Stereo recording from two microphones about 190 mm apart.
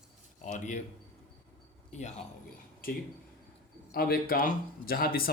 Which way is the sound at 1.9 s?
40° left (ahead or behind).